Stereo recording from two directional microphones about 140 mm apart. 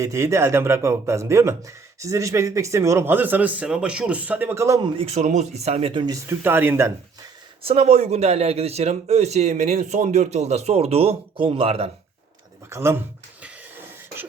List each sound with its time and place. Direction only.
0.0 s speech: 20° right (ahead or behind)
4.9 s speech: 50° right (ahead or behind)
5.9 s speech: 35° right (ahead or behind)
6.1 s speech: 15° right (ahead or behind)
7.6 s speech: 50° right (ahead or behind)
12.7 s speech: 20° right (ahead or behind)